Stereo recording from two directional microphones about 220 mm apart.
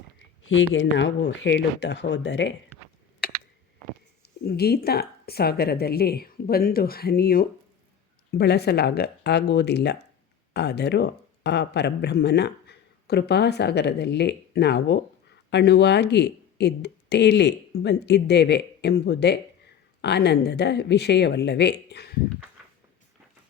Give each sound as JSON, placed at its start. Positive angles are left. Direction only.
{"t": 0.2, "sound": "speech", "side_deg": 60}
{"t": 4.4, "sound": "speech", "side_deg": 45}